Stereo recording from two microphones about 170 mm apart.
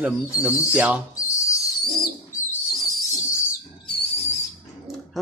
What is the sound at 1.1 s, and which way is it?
Bird, 15° left (ahead or behind).